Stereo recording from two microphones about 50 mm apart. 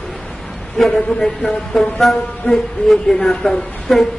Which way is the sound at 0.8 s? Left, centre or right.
Centre.